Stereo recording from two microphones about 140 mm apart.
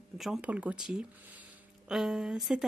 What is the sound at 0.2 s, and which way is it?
A woman's voice, 5° right (ahead or behind).